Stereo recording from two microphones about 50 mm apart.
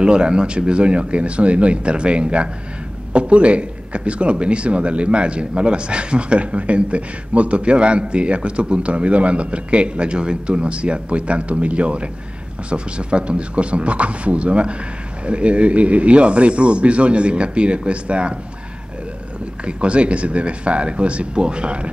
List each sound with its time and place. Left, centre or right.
0.0 s a man's voice: centre
19.6 s a man's voice: right